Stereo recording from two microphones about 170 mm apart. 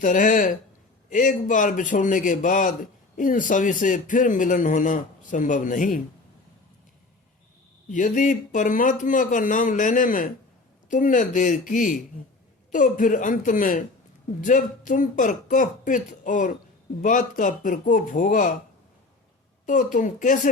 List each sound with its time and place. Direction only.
0.0 s a man's voice: 50° left (ahead or behind)
7.9 s a man's voice: 50° left (ahead or behind)
19.6 s a man's voice: 50° left (ahead or behind)